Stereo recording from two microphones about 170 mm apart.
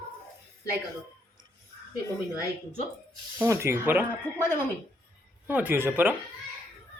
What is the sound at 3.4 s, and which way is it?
Speech, 15° right (ahead or behind).